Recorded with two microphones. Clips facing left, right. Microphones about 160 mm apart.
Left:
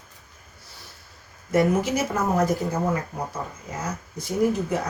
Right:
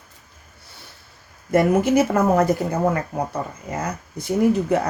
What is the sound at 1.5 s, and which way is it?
Speech, 60° right (ahead or behind).